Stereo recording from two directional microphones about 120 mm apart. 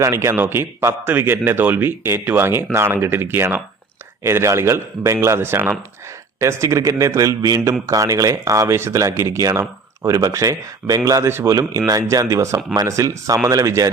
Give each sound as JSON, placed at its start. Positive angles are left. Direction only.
{"t": 0.0, "sound": "a man's voice", "side_deg": -25}